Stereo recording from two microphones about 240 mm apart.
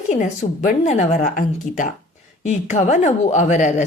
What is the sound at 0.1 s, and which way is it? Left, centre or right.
A woman's voice, left.